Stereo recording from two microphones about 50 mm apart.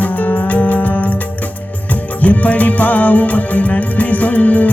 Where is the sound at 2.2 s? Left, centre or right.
Left.